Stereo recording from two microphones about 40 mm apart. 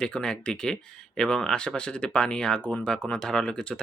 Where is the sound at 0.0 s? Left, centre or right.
Left.